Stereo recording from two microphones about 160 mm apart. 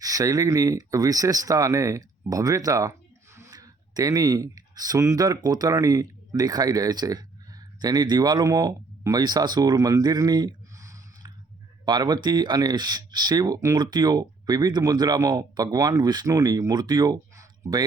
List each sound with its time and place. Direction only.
0.0 s speech: 20° right (ahead or behind)